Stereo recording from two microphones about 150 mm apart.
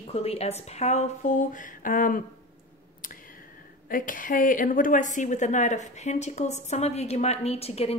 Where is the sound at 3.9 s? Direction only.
65° left (ahead or behind).